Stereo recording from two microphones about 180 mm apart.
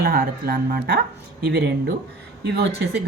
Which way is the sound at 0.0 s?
55° right (ahead or behind).